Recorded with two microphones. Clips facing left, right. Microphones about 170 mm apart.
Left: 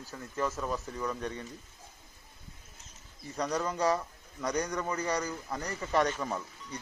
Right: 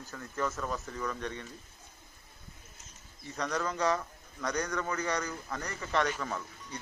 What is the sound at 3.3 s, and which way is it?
A man's voice, 15° left (ahead or behind).